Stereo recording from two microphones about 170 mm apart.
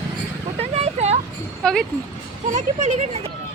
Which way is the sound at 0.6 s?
40° right (ahead or behind).